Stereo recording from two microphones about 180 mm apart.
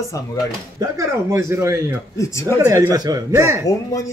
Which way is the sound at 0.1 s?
20° left (ahead or behind).